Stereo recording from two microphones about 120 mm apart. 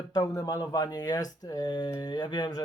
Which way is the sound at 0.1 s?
30° left (ahead or behind).